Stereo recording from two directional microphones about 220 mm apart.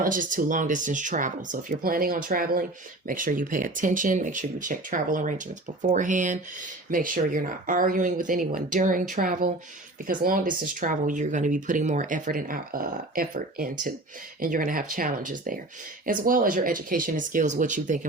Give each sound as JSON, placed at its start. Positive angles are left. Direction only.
{"t": 0.0, "sound": "speech", "side_deg": -40}